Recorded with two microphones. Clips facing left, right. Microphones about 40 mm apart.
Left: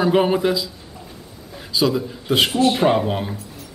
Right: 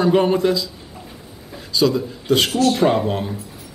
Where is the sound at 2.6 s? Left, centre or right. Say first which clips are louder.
Even; left.